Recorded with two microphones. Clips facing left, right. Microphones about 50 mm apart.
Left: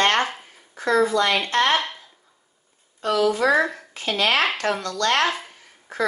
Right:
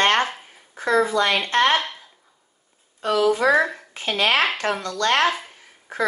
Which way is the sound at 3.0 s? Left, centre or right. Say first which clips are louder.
Right 1 dB; centre.